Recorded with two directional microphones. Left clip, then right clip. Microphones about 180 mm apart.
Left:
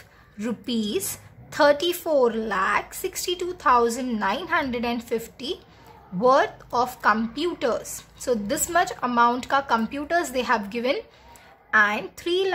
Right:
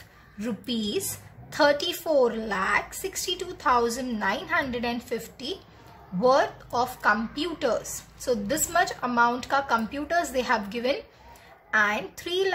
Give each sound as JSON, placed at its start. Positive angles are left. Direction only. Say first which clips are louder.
{"t": 0.4, "sound": "a woman's voice", "louder": "left 3 dB", "side_deg": 20}